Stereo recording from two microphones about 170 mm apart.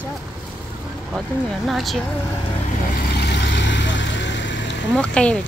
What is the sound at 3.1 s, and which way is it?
Vehicle, 90° left.